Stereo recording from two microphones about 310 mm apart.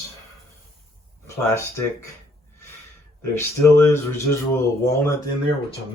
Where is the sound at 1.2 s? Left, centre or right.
Centre.